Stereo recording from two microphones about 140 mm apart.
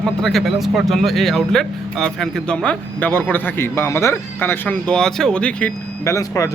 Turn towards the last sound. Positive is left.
turn(degrees=20)  # may be behind; listen again after turning